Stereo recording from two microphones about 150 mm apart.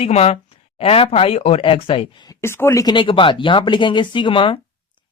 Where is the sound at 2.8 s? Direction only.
35° left (ahead or behind).